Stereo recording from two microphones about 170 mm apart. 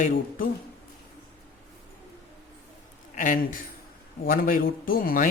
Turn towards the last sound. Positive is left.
turn(degrees=55)  # may be behind; listen again after turning